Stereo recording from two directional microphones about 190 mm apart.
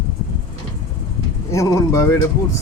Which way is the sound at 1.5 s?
15° left (ahead or behind).